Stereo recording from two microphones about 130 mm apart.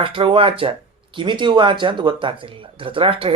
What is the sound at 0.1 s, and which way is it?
Speech, 40° right (ahead or behind).